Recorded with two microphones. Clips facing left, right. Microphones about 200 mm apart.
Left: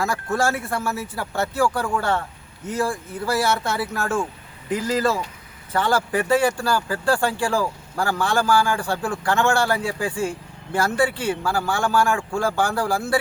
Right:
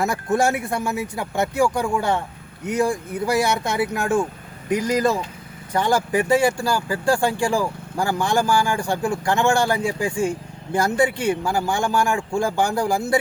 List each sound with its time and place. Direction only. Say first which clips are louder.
0.0 s speech: right 3 dB; 20° right (ahead or behind)